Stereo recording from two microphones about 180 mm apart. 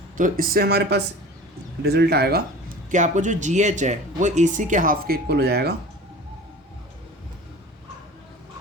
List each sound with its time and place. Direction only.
0.2 s speech: 55° right (ahead or behind)
2.9 s speech: 45° right (ahead or behind); by 5.7 s 60° right (ahead or behind)